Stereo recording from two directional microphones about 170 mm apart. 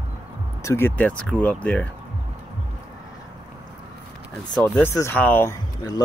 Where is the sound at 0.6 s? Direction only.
15° left (ahead or behind).